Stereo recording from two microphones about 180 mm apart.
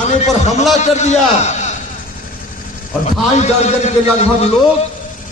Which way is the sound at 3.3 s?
40° left (ahead or behind).